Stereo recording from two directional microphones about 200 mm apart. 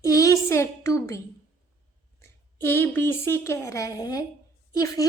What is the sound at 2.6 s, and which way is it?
A woman's voice, 10° left (ahead or behind).